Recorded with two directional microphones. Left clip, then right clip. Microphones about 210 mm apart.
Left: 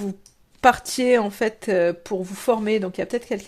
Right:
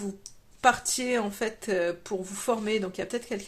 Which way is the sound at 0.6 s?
40° left (ahead or behind).